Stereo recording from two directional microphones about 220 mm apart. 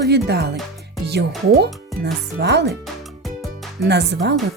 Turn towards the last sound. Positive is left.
turn(degrees=-50)  # may be behind; listen again after turning